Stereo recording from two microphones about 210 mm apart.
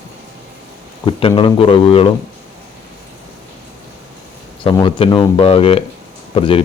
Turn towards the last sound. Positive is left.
turn(degrees=25)  # may be behind; listen again after turning